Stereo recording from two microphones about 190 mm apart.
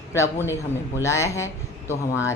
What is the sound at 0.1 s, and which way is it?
Speech, 15° left (ahead or behind).